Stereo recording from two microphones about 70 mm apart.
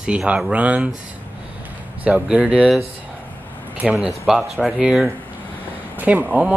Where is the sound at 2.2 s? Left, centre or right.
Centre.